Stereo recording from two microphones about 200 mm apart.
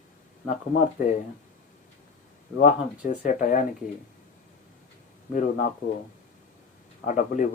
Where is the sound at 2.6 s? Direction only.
40° left (ahead or behind).